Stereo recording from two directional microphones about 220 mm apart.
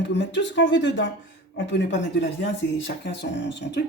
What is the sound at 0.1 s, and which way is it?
Speech, 55° left (ahead or behind).